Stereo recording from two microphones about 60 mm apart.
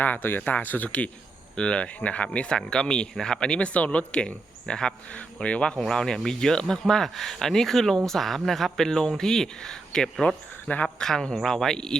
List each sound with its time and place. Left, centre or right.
0.0 s speech: left
5.7 s speech: centre